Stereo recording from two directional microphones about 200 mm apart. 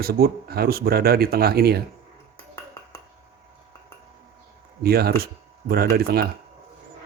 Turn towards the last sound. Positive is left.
turn(degrees=-50)  # may be behind; listen again after turning